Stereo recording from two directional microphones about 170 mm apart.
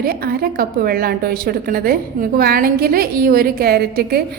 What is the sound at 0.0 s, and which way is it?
A woman's voice, 65° right (ahead or behind).